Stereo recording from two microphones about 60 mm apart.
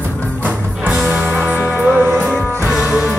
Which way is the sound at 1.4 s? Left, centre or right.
Left.